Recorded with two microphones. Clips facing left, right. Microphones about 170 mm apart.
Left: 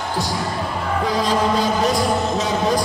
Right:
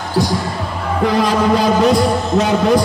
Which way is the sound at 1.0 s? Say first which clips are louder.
Right 6 dB; 65° right (ahead or behind).